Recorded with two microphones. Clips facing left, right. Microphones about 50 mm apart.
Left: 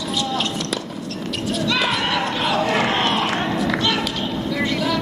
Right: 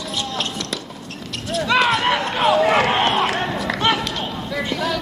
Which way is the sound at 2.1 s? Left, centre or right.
Right.